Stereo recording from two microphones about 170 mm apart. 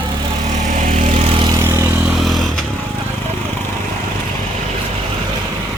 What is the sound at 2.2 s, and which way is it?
Vehicle, centre (ahead or behind).